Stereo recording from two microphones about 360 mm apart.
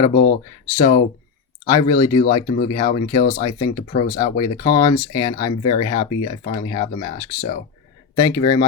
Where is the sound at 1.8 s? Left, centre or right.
Centre.